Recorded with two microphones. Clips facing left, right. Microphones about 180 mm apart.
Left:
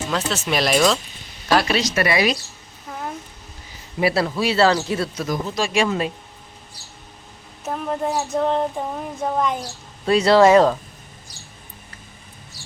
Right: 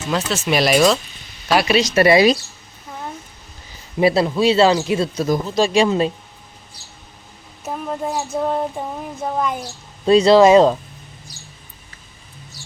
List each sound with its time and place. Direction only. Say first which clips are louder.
0.1 s child singing: right 5 dB; 5° right (ahead or behind)
1.5 s speech: right 2 dB; 10° right (ahead or behind)
2.0 s speech: right 9 dB; 30° right (ahead or behind)
4.0 s speech: right 5 dB; 20° right (ahead or behind)
7.6 s child singing: left 1 dB; 5° right (ahead or behind)
10.1 s speech: right 3 dB; 20° right (ahead or behind)